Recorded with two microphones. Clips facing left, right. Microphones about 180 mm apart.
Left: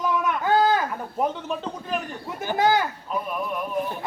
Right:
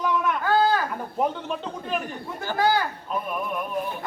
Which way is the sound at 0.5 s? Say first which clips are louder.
Left 1 dB; 20° left (ahead or behind).